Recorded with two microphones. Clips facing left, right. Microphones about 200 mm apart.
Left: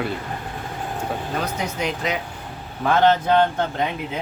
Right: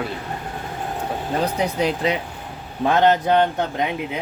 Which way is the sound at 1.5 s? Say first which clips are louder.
Right 5 dB; 35° right (ahead or behind).